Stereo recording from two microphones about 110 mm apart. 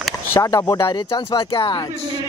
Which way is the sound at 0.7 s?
45° left (ahead or behind).